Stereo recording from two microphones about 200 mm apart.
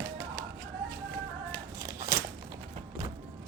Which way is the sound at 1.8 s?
15° right (ahead or behind).